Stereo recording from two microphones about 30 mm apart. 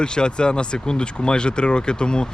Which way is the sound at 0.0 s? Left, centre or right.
Left.